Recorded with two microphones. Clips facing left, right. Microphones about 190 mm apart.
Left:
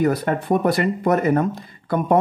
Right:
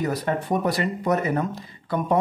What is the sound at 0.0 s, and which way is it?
Speech, 55° left (ahead or behind).